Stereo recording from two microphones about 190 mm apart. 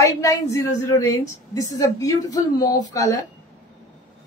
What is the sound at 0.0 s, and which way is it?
A woman's voice, 15° left (ahead or behind).